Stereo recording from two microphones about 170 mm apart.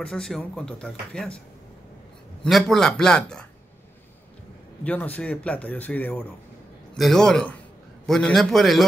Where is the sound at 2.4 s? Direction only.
Centre (ahead or behind).